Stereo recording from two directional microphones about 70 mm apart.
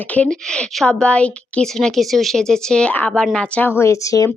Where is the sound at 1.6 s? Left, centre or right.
Centre.